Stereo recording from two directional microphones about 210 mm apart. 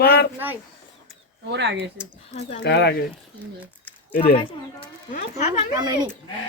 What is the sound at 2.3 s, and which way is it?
Speech, 30° left (ahead or behind).